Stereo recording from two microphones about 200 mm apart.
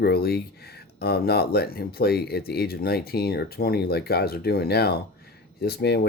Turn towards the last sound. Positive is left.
turn(degrees=55)  # may be behind; listen again after turning